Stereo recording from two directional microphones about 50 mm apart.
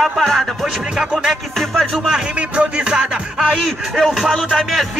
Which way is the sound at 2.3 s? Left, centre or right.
Right.